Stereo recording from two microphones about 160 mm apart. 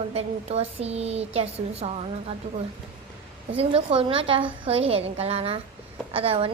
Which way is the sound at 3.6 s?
35° right (ahead or behind).